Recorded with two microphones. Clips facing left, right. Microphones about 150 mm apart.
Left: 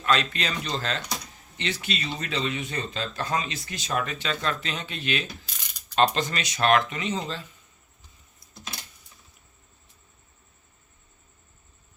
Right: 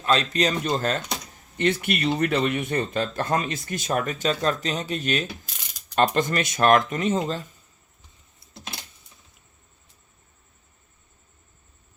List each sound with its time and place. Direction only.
0.0 s speech: 35° right (ahead or behind)